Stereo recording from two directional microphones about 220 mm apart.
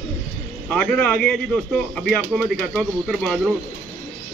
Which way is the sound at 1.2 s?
5° left (ahead or behind).